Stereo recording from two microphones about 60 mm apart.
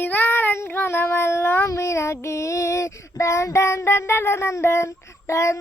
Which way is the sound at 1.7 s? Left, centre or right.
Left.